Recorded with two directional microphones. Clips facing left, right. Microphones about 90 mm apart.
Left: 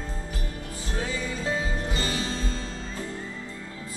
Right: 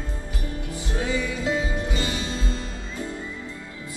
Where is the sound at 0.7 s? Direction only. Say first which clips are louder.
Right 5 dB; 35° left (ahead or behind).